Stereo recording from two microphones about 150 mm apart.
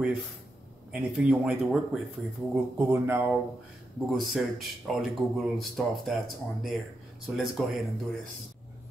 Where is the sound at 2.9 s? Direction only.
15° right (ahead or behind).